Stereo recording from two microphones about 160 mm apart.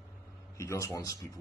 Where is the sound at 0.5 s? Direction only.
20° left (ahead or behind).